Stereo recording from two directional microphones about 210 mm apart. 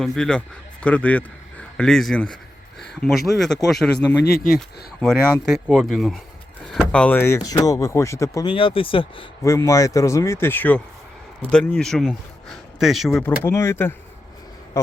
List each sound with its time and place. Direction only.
0.0 s a man's voice: 5° left (ahead or behind)
3.9 s a man's voice: 50° left (ahead or behind)
5.0 s a man's voice: centre (ahead or behind); by 9.2 s 25° left (ahead or behind)
9.4 s a man's voice: 15° left (ahead or behind)
13.2 s speech: 10° left (ahead or behind)